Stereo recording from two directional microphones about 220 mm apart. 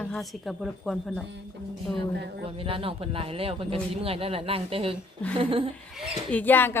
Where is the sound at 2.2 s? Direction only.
50° right (ahead or behind).